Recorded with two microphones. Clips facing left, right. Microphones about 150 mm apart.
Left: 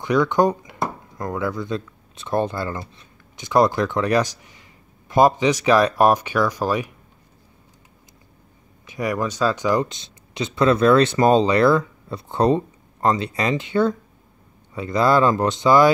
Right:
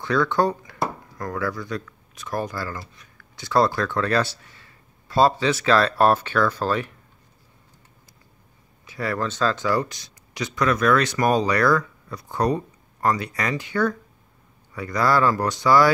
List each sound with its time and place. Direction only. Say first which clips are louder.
0.0 s speech: left 3 dB; 15° left (ahead or behind)
8.8 s speech: left 3 dB; 15° left (ahead or behind)